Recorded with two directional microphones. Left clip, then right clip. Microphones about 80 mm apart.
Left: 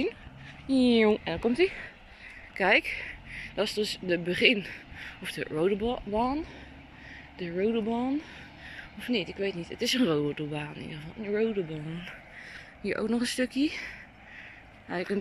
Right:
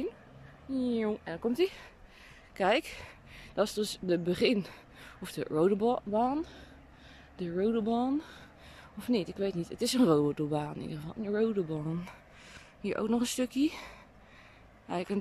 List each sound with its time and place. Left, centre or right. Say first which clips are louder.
0.7 s speech: left 9 dB; centre
1.5 s speech: left 3 dB; right
7.6 s speech: left 1 dB; right
8.6 s speech: left 1 dB; right
11.2 s speech: left 2 dB; right
12.5 s speech: left 2 dB; right
14.9 s speech: left 3 dB; right